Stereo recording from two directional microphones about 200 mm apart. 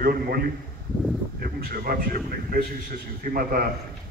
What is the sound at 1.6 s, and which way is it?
Speech, 50° right (ahead or behind).